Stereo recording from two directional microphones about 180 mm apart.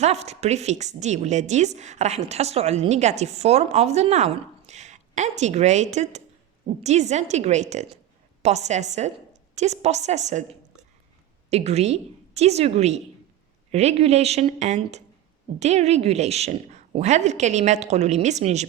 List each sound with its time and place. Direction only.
0.0 s a woman's voice: 35° right (ahead or behind)
11.5 s a woman's voice: 35° right (ahead or behind)